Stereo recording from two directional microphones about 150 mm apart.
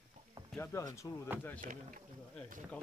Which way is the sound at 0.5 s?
20° left (ahead or behind).